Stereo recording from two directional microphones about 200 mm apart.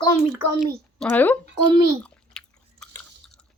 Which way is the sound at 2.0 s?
5° left (ahead or behind).